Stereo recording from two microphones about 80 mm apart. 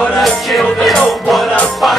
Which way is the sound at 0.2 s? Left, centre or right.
Centre.